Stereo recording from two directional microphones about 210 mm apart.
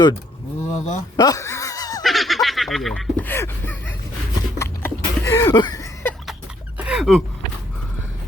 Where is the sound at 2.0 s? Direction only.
Centre (ahead or behind).